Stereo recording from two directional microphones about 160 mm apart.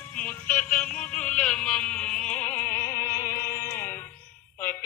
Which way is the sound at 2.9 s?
65° left (ahead or behind).